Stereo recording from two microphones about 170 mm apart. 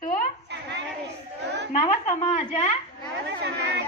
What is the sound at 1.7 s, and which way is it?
Speech, 35° left (ahead or behind).